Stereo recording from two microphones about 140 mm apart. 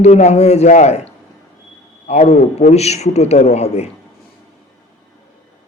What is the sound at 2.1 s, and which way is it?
A man's voice, 50° left (ahead or behind).